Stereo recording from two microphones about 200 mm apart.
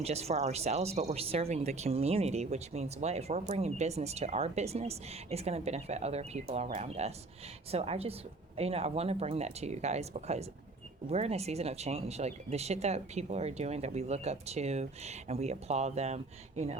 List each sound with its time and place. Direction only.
0.0 s a woman's voice: 30° right (ahead or behind)